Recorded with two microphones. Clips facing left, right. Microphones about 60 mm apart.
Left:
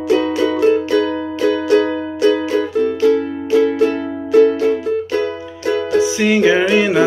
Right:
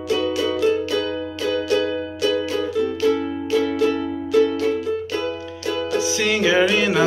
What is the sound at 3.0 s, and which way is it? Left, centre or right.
Music, left.